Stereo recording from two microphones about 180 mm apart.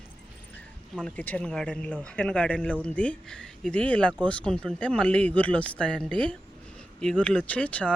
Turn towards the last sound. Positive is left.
turn(degrees=5)  # may be behind; listen again after turning